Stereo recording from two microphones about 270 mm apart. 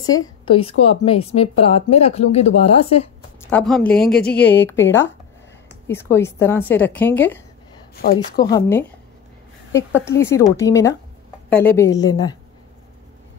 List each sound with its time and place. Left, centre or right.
0.0 s a woman's voice: left
0.5 s speech: left
3.3 s a woman's voice: centre
7.9 s speech: left
8.3 s a woman's voice: centre